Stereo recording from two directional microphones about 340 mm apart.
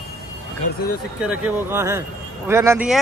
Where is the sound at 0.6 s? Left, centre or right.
Left.